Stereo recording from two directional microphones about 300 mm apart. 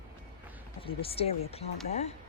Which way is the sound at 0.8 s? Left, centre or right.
Centre.